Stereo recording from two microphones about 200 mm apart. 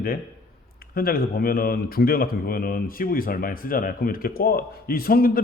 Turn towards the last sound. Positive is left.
turn(degrees=50)  # may be behind; listen again after turning